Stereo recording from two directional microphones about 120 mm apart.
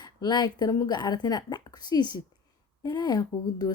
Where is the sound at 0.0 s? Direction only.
35° left (ahead or behind).